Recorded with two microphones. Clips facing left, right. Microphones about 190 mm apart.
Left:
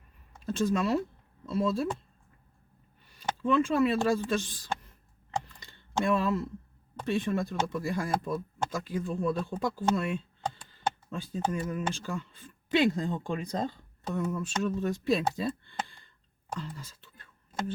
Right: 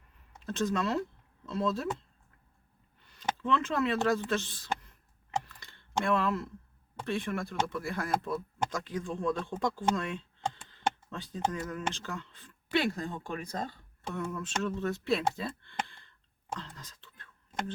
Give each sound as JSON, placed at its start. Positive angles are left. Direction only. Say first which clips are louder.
{"t": 0.4, "sound": "speech", "louder": "left 3 dB", "side_deg": 10}
{"t": 3.4, "sound": "speech", "louder": "left 5 dB", "side_deg": 10}
{"t": 6.1, "sound": "speech", "louder": "left 2 dB", "side_deg": 15}
{"t": 16.6, "sound": "whispering", "louder": "left 6 dB", "side_deg": 10}